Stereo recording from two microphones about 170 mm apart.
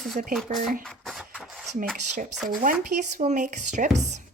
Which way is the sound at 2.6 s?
50° right (ahead or behind).